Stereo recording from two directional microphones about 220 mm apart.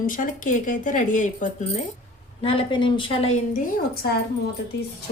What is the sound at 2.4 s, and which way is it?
Speech, 25° left (ahead or behind).